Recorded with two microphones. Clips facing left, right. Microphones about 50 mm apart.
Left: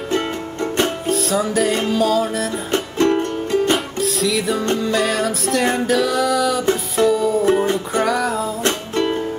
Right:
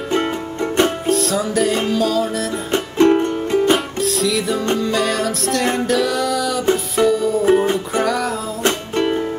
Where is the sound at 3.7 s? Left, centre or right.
Centre.